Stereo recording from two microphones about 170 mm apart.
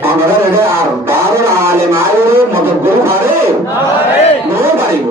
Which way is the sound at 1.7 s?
15° right (ahead or behind).